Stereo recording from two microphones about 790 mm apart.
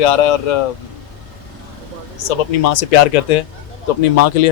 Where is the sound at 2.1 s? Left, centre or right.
Left.